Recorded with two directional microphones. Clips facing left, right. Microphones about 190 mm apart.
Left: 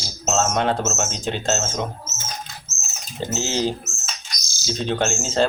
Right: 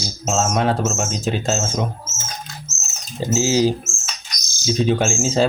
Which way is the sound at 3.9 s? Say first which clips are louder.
Right 1 dB; 20° right (ahead or behind).